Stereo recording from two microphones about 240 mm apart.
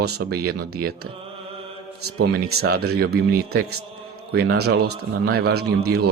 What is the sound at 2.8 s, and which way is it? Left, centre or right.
Speech, right.